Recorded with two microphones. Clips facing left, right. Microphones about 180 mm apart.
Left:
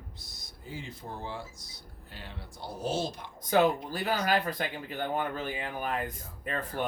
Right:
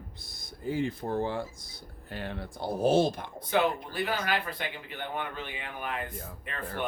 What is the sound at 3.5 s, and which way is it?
Speech, 40° left (ahead or behind).